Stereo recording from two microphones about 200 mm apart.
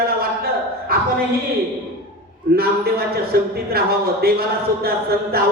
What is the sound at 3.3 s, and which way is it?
Speech, 50° right (ahead or behind).